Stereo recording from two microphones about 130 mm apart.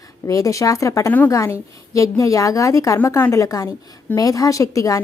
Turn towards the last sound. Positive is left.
turn(degrees=25)  # may be behind; listen again after turning